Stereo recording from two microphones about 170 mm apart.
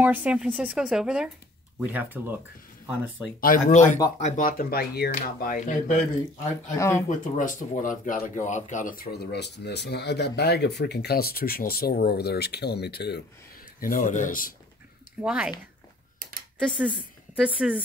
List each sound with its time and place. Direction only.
0.0 s speech: 10° right (ahead or behind)
3.3 s speech: 55° left (ahead or behind)
6.8 s speech: 15° left (ahead or behind)
7.1 s speech: 50° left (ahead or behind); by 13.2 s 75° left (ahead or behind)
13.7 s speech: 50° left (ahead or behind)
15.2 s speech: 5° right (ahead or behind)
16.5 s a woman's voice: centre (ahead or behind)